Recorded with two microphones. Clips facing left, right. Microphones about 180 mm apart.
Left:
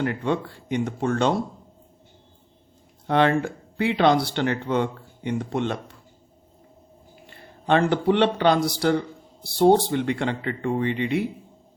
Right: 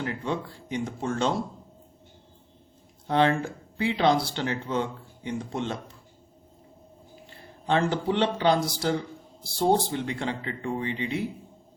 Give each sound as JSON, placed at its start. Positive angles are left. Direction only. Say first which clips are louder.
{"t": 0.0, "sound": "speech", "louder": "left 6 dB", "side_deg": 65}
{"t": 3.1, "sound": "speech", "louder": "left 3 dB", "side_deg": 60}
{"t": 7.3, "sound": "a man's voice", "louder": "left 5 dB", "side_deg": 65}